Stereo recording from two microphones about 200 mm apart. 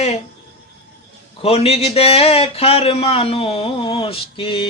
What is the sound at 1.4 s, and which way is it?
Speech, 30° left (ahead or behind).